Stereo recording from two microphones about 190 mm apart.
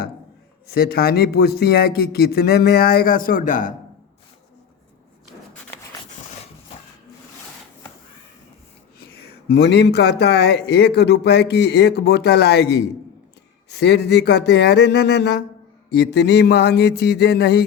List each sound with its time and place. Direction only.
0.7 s a man's voice: 55° left (ahead or behind)
9.5 s a man's voice: 65° left (ahead or behind)